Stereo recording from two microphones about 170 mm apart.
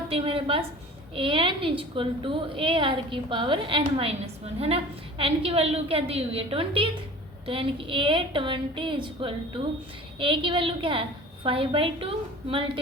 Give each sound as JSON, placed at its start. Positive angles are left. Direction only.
{"t": 0.1, "sound": "a woman's voice", "side_deg": -35}